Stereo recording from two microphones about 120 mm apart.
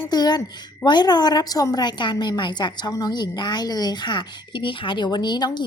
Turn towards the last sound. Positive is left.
turn(degrees=35)  # may be behind; listen again after turning